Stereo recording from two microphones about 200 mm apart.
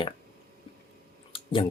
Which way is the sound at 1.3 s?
25° left (ahead or behind).